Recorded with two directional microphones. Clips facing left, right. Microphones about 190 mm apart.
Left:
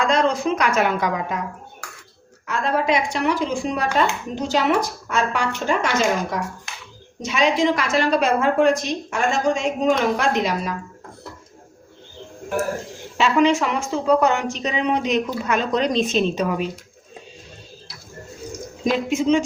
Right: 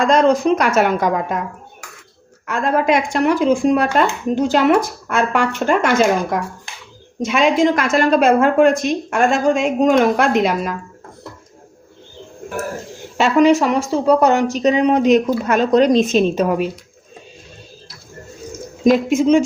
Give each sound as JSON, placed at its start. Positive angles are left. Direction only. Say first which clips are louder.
{"t": 0.0, "sound": "speech", "louder": "right 6 dB", "side_deg": -45}
{"t": 2.5, "sound": "speech", "louder": "right 4 dB", "side_deg": -50}
{"t": 13.1, "sound": "speech", "louder": "right 5 dB", "side_deg": -45}
{"t": 18.9, "sound": "speech", "louder": "right 6 dB", "side_deg": -45}